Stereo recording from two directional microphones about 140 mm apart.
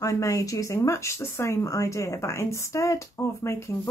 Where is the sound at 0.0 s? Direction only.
20° left (ahead or behind).